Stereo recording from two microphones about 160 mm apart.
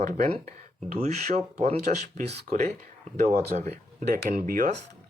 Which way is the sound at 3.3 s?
45° right (ahead or behind).